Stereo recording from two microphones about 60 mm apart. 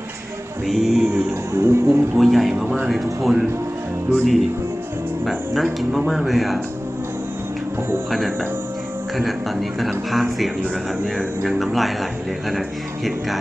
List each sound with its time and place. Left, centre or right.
0.7 s speech: centre
1.1 s music: right
1.9 s speech: centre
8.1 s speech: centre
11.5 s speech: centre